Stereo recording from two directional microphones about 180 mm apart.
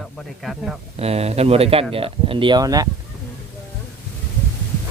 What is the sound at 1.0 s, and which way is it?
Speech, 35° right (ahead or behind).